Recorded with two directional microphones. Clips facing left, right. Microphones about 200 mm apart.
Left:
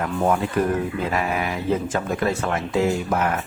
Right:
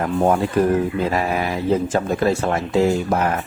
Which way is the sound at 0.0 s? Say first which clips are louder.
Right 4 dB; 35° right (ahead or behind).